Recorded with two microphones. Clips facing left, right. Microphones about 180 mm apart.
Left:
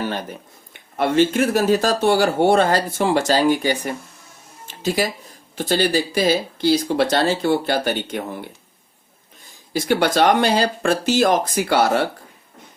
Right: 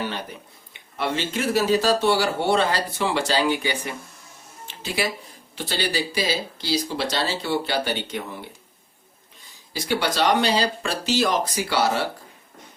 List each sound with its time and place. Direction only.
0.0 s speech: 45° left (ahead or behind)
9.7 s speech: 50° left (ahead or behind)